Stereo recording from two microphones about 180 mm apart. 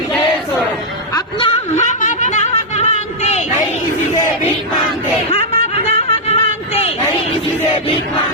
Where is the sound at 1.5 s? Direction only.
40° left (ahead or behind).